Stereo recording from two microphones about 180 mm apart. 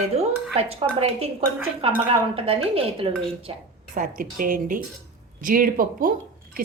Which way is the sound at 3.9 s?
50° right (ahead or behind).